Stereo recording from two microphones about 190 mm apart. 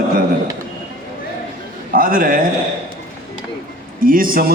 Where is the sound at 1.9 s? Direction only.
50° right (ahead or behind).